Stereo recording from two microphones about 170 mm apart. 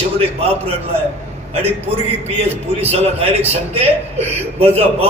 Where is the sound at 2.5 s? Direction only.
35° right (ahead or behind).